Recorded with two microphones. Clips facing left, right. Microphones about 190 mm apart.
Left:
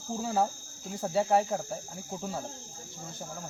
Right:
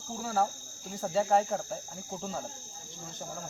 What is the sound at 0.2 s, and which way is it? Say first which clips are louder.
Cricket: left 1 dB; 20° left (ahead or behind).